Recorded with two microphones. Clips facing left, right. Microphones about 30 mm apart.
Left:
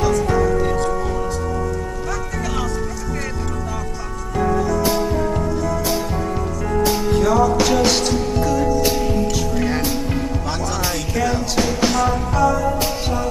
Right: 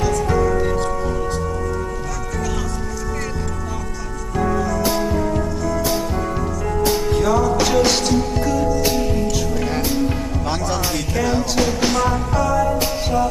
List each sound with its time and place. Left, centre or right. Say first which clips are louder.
0.0 s music: left 1 dB; centre
7.2 s music: left 3 dB; centre
10.4 s speech: right 1 dB; centre
10.8 s music: even; centre